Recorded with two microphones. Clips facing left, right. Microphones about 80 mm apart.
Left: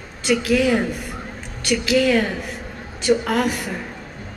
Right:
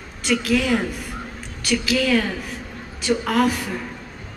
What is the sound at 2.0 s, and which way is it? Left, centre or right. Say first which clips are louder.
Speech: left 5 dB; left.